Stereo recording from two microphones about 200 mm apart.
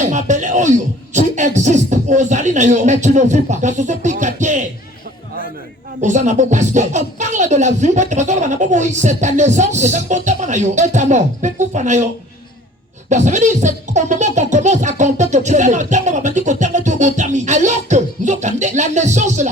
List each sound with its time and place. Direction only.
0.0 s speech: 40° right (ahead or behind)
6.0 s speech: 35° right (ahead or behind)
13.1 s speech: 35° right (ahead or behind)